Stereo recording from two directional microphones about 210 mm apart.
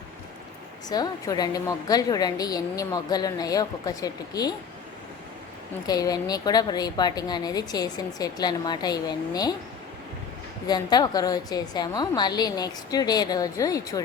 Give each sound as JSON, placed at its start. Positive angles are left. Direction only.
{"t": 0.9, "sound": "a woman's voice", "side_deg": 20}
{"t": 5.8, "sound": "a woman's voice", "side_deg": 20}
{"t": 10.7, "sound": "a woman's voice", "side_deg": 20}